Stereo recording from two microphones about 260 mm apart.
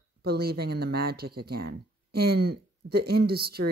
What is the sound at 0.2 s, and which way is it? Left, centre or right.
Speech, right.